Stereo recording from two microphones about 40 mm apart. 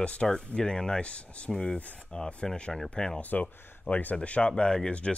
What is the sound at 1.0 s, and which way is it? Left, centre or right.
Speech, left.